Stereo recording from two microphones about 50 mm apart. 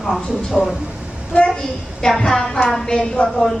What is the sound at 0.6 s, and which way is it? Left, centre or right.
A woman's voice, centre.